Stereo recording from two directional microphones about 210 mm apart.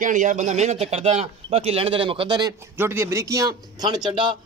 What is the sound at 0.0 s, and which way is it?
Speech, 35° right (ahead or behind).